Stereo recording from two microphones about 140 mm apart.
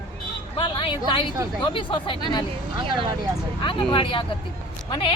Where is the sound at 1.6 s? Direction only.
35° left (ahead or behind).